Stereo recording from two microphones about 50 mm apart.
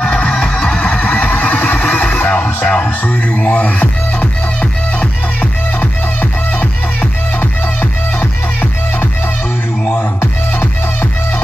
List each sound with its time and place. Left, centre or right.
0.0 s music: left
0.3 s music: centre
6.6 s music: left
10.6 s music: left